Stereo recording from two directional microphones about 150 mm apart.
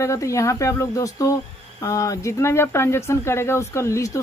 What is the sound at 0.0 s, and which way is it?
Speech, 20° left (ahead or behind).